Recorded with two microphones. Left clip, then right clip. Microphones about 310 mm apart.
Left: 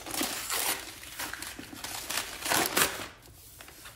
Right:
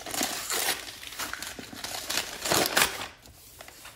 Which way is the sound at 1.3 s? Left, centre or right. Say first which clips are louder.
Right 3 dB; right.